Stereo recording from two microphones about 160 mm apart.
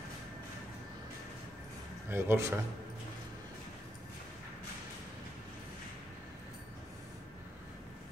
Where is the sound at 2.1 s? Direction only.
15° right (ahead or behind).